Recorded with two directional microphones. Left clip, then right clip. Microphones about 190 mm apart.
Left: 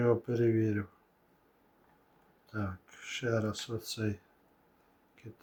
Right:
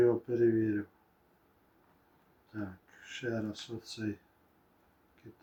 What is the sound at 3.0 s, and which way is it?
Speech, 55° left (ahead or behind).